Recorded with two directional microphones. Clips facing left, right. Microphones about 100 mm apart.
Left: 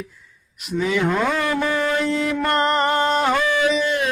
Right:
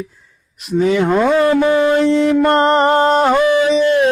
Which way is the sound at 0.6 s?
45° right (ahead or behind).